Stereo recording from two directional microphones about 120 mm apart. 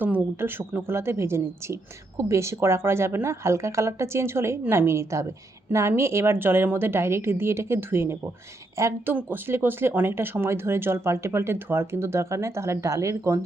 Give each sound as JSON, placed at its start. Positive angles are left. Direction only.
{"t": 0.0, "sound": "a woman's voice", "side_deg": -15}